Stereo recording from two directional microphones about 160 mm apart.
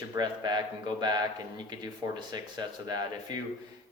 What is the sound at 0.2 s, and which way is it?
Speech, 25° right (ahead or behind).